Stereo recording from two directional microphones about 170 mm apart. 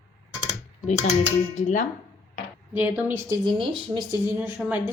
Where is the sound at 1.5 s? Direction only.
45° left (ahead or behind).